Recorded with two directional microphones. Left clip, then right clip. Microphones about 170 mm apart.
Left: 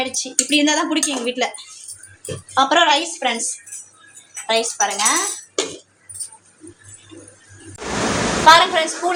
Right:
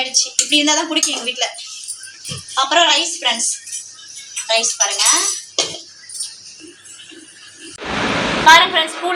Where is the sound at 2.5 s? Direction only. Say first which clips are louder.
Right 1 dB; 65° left (ahead or behind).